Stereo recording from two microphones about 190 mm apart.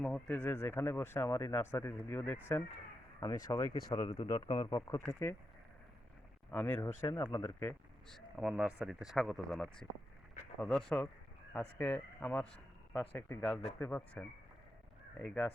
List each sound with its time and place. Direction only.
0.0 s speech: 5° left (ahead or behind)
6.5 s speech: 15° left (ahead or behind)
7.1 s speech: 25° left (ahead or behind)
8.1 s speech: 5° right (ahead or behind)